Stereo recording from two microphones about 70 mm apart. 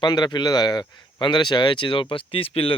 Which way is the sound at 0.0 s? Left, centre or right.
Left.